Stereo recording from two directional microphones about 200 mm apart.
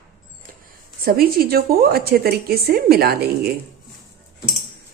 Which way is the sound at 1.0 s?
50° right (ahead or behind).